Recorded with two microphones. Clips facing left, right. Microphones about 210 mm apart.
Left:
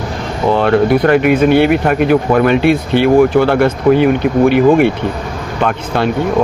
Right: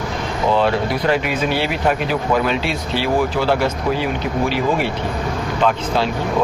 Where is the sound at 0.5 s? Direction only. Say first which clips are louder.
Left 8 dB; 60° left (ahead or behind).